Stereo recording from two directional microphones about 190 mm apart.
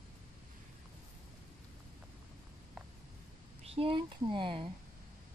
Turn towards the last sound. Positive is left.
turn(degrees=-25)  # may be behind; listen again after turning